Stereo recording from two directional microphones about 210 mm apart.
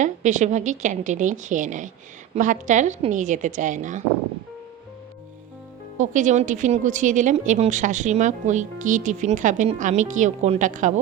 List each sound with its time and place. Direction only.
0.0 s a woman's voice: 35° right (ahead or behind)
6.0 s a woman's voice: 35° right (ahead or behind)